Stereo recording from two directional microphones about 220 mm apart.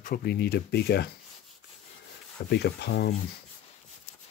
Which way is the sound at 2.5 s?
50° left (ahead or behind).